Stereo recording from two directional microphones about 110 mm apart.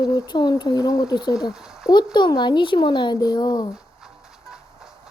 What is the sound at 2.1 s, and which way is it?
Speech, 45° left (ahead or behind).